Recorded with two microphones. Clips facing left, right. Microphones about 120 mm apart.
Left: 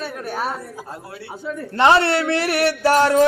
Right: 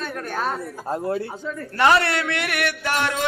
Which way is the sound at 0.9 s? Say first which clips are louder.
Right 11 dB; 45° right (ahead or behind).